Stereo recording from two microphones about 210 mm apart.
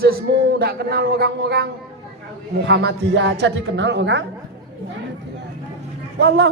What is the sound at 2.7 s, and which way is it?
A man's voice, 55° right (ahead or behind).